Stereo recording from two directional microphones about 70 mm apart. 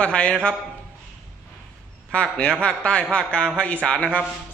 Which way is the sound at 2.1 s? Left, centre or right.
Centre.